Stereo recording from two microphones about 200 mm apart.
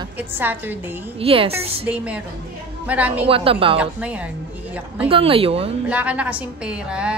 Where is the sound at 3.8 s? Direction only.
5° right (ahead or behind).